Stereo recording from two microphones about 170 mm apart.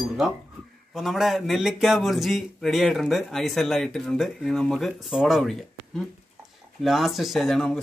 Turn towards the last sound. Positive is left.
turn(degrees=0)  # may be behind; listen again after turning